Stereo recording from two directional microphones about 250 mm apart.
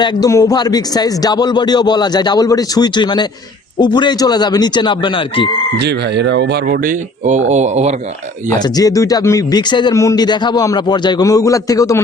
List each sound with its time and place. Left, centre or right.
0.0 s speech: centre
5.8 s speech: right
8.4 s speech: centre